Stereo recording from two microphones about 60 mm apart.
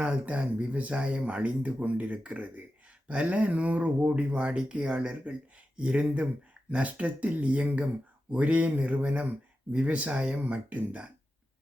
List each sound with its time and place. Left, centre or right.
0.0 s speech: right